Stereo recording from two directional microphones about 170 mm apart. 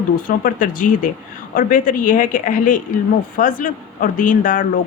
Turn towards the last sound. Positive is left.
turn(degrees=50)  # may be behind; listen again after turning